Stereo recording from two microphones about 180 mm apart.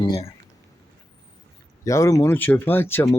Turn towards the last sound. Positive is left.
turn(degrees=15)  # may be behind; listen again after turning